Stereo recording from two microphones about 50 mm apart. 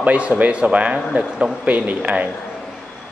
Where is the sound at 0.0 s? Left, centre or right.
Right.